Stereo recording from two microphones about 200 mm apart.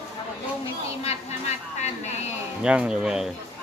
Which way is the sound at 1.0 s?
35° left (ahead or behind).